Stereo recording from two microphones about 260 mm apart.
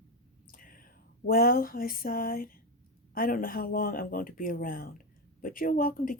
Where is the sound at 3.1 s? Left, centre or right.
Left.